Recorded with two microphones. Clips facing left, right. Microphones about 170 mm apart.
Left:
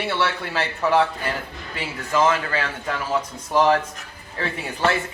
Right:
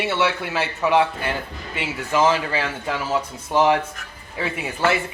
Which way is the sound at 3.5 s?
15° right (ahead or behind).